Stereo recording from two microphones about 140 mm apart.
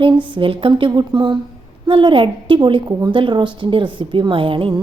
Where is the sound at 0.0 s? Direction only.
35° right (ahead or behind).